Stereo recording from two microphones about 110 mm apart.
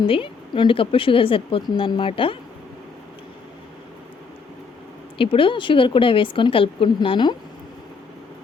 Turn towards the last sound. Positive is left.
turn(degrees=50)  # may be behind; listen again after turning